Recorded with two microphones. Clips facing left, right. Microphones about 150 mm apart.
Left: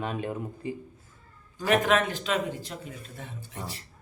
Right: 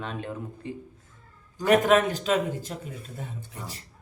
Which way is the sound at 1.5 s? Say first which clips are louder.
Right 4 dB; 40° right (ahead or behind).